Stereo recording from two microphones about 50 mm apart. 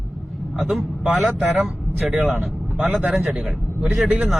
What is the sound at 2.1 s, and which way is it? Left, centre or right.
Speech, right.